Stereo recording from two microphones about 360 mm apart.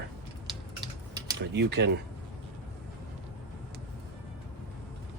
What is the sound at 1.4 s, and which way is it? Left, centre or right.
Speech, right.